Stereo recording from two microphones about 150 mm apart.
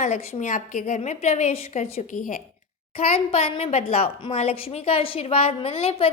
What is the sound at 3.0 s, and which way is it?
A woman's voice, 40° left (ahead or behind).